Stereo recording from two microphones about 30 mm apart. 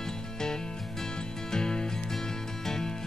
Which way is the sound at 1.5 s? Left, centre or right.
Left.